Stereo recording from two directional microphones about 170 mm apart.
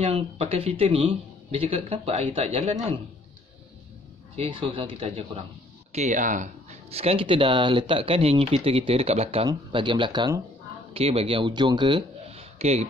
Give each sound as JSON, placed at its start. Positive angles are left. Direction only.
{"t": 0.0, "sound": "speech", "side_deg": -35}
{"t": 4.4, "sound": "speech", "side_deg": -30}
{"t": 5.9, "sound": "a man's voice", "side_deg": -45}